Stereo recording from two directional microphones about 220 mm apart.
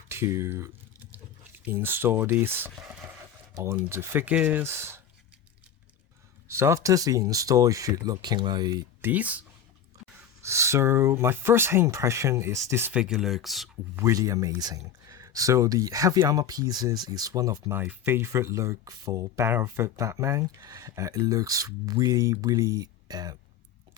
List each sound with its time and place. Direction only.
0.1 s speech: 10° right (ahead or behind)
6.5 s speech: 10° right (ahead or behind)
10.4 s speech: 15° right (ahead or behind)
14.0 s speech: 15° right (ahead or behind)